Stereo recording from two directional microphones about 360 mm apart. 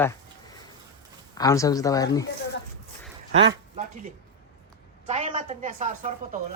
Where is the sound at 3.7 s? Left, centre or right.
Right.